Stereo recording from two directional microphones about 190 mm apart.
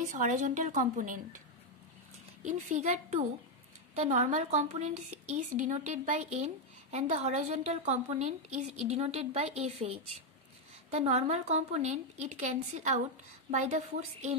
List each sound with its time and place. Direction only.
0.0 s a woman's voice: 40° right (ahead or behind)
2.4 s a woman's voice: 40° right (ahead or behind)